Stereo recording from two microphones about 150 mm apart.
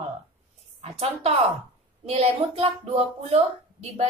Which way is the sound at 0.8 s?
45° right (ahead or behind).